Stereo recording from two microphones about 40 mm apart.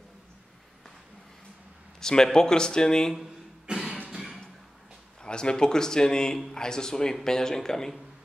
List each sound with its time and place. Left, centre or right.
2.0 s speech: centre
3.6 s music: centre
5.2 s speech: left